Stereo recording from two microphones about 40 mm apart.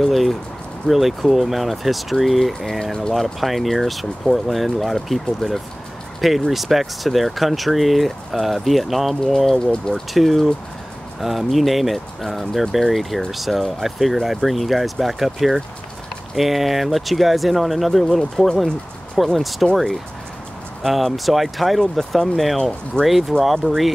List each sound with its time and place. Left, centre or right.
0.0 s speech: centre
3.3 s speech: centre
9.7 s speech: centre
10.1 s speech: centre